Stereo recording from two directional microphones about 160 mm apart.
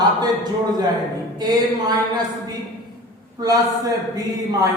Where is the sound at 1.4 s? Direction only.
25° right (ahead or behind).